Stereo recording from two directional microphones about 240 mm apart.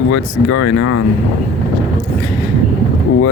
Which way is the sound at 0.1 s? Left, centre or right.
Left.